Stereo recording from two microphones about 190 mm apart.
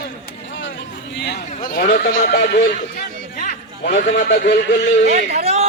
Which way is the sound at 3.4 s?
40° left (ahead or behind).